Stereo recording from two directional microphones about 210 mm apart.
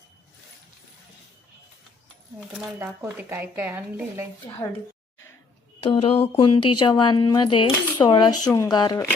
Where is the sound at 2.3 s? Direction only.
5° right (ahead or behind).